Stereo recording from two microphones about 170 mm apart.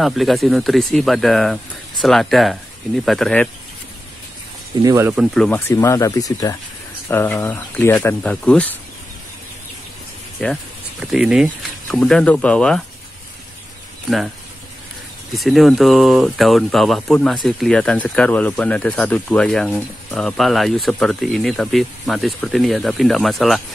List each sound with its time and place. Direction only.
0.0 s speech: centre (ahead or behind)
4.8 s speech: 15° right (ahead or behind)
5.1 s speech: centre (ahead or behind)
5.7 s speech: 15° left (ahead or behind)
10.4 s speech: centre (ahead or behind)
12.0 s speech: 5° left (ahead or behind)
15.3 s speech: centre (ahead or behind)